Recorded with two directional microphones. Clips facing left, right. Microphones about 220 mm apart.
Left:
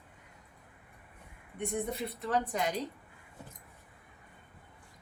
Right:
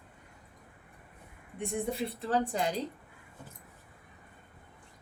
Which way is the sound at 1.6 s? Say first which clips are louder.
Right 1 dB; 30° right (ahead or behind).